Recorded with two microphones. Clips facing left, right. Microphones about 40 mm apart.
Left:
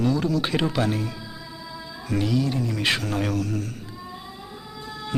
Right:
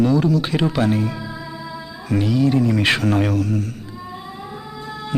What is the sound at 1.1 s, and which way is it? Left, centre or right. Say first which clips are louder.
Music: right 8 dB; right.